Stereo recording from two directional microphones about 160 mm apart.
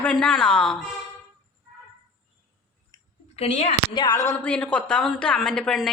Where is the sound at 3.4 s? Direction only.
40° left (ahead or behind).